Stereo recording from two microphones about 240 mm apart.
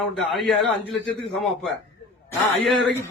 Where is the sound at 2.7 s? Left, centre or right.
Centre.